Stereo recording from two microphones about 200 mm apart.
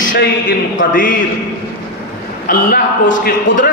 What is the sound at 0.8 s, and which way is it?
Speech, 45° left (ahead or behind).